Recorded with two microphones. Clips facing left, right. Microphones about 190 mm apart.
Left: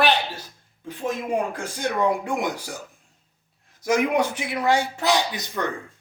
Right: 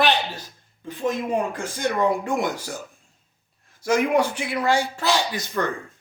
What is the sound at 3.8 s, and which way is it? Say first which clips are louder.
Speech: right 1 dB; 20° left (ahead or behind).